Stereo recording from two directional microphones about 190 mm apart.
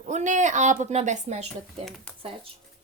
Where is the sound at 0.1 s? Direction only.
40° right (ahead or behind).